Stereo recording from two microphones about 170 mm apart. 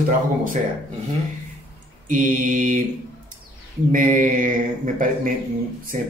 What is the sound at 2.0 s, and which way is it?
Speech, 50° right (ahead or behind).